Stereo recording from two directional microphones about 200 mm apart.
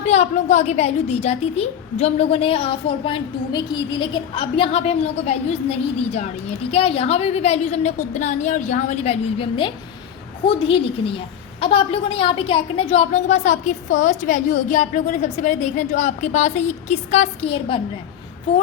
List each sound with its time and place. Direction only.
0.0 s a woman's voice: 35° left (ahead or behind)